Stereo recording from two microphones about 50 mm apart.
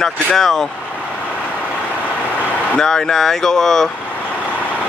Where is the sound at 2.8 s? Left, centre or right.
Centre.